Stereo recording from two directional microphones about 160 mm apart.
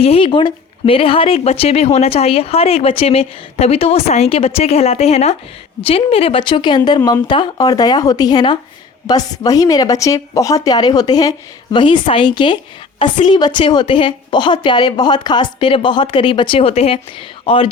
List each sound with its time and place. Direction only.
0.0 s a woman's voice: 35° left (ahead or behind)